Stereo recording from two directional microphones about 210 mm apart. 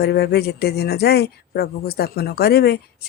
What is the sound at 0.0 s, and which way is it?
Speech, 50° left (ahead or behind).